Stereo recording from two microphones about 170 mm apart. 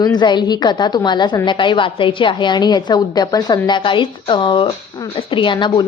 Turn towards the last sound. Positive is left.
turn(degrees=25)  # may be behind; listen again after turning